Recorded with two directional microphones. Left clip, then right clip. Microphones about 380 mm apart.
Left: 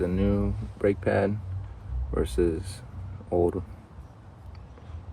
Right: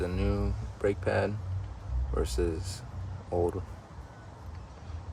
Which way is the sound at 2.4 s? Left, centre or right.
Centre.